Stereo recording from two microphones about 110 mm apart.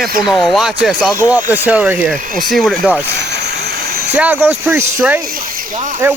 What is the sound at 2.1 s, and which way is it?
Speech, centre (ahead or behind).